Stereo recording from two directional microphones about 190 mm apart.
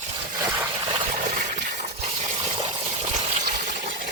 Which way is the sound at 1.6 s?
40° right (ahead or behind).